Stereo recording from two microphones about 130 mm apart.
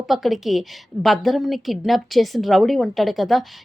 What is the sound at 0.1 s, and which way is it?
A woman's voice, centre (ahead or behind).